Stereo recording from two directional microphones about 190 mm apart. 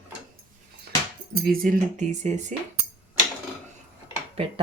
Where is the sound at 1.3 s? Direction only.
50° right (ahead or behind).